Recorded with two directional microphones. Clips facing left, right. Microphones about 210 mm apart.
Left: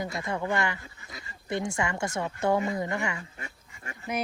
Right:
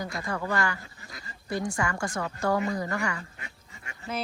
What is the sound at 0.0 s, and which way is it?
Speech, 25° left (ahead or behind).